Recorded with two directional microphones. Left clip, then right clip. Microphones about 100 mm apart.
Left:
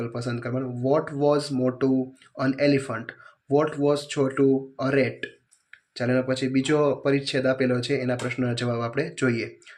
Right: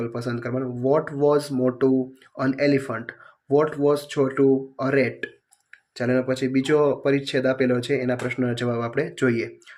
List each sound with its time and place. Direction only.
0.0 s speech: 30° right (ahead or behind)
8.4 s speech: 30° right (ahead or behind)